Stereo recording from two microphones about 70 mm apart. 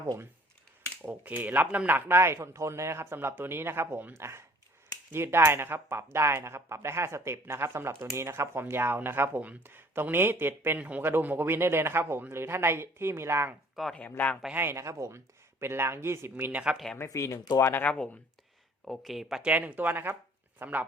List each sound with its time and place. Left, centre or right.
1.0 s speech: right
10.8 s speech: right
13.8 s speech: centre
14.5 s speech: right
14.8 s speech: right
16.7 s speech: centre
17.1 s speech: left
17.6 s speech: left
17.8 s speech: centre
18.9 s speech: centre
19.4 s speech: centre